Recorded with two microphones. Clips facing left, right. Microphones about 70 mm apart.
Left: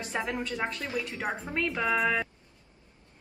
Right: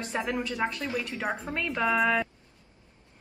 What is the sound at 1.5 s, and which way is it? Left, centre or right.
Speech, centre.